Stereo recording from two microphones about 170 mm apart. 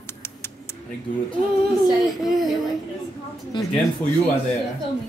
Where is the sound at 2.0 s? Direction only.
Centre (ahead or behind).